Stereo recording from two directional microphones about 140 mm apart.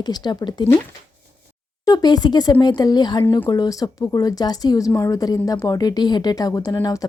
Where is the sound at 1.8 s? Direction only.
30° left (ahead or behind).